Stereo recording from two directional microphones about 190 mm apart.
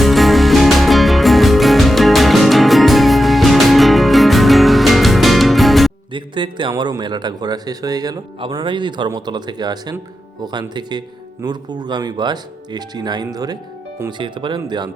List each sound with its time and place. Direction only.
0.0 s music: centre (ahead or behind)
6.1 s a man's voice: 25° right (ahead or behind)